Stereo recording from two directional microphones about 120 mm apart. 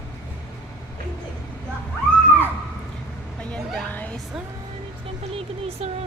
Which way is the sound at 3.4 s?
10° left (ahead or behind).